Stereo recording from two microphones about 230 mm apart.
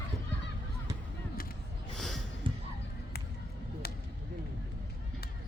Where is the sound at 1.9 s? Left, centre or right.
Centre.